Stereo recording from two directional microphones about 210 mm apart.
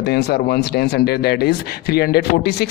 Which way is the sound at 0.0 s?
50° left (ahead or behind).